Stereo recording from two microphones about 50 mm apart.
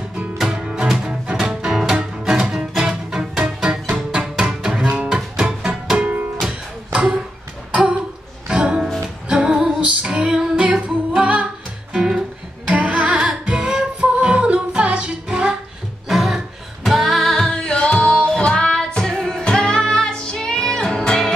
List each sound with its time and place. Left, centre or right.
0.5 s music: centre
3.9 s music: right
4.4 s music: centre
5.9 s music: right
6.9 s a sound: right
8.5 s music: centre
12.6 s music: right
16.1 s a sound: centre
16.8 s music: centre
17.5 s music: centre